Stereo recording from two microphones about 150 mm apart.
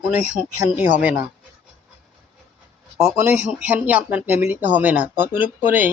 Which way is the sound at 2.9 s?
10° right (ahead or behind).